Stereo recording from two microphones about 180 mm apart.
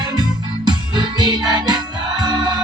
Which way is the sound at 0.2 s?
25° right (ahead or behind).